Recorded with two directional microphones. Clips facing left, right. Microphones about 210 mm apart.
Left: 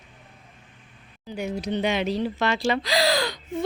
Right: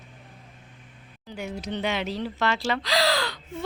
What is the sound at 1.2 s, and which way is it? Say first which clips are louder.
A woman's voice: left 4 dB; 15° left (ahead or behind).